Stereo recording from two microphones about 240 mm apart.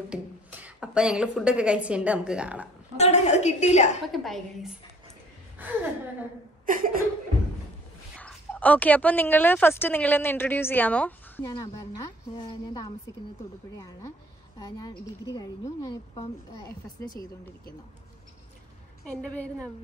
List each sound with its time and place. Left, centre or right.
0.1 s a woman's voice: centre
3.0 s a sound: left
4.1 s a woman's voice: centre
6.6 s chuckle: right
8.2 s a woman's voice: centre
14.6 s a woman's voice: centre